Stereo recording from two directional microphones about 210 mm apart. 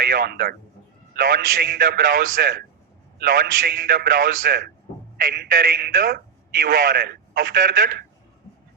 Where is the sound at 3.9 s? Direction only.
45° right (ahead or behind).